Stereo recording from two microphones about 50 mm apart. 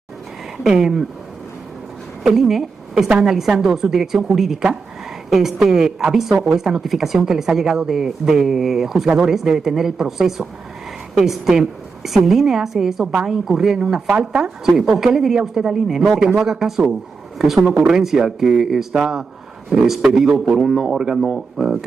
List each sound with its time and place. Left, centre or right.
0.7 s speech: centre
2.2 s speech: centre
3.1 s a woman's voice: centre
14.8 s speech: centre